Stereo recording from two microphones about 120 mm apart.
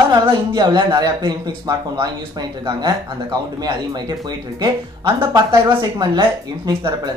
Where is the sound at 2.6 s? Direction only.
30° right (ahead or behind).